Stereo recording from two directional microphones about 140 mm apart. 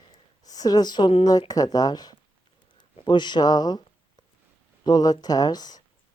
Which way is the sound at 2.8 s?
30° left (ahead or behind).